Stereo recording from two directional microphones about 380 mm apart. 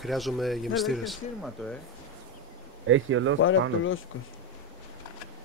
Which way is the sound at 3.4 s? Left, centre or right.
Left.